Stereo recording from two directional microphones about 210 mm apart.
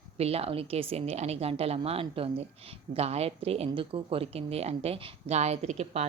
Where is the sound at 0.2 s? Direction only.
30° right (ahead or behind).